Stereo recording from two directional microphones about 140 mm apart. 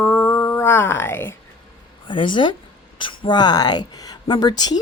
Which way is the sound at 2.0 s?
35° left (ahead or behind).